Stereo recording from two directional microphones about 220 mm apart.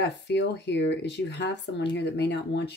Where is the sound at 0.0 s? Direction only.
55° left (ahead or behind).